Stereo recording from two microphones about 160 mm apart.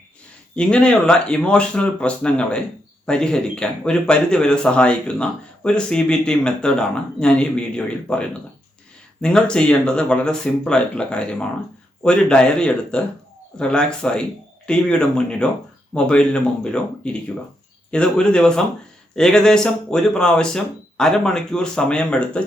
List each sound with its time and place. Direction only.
0.5 s a man's voice: 5° left (ahead or behind)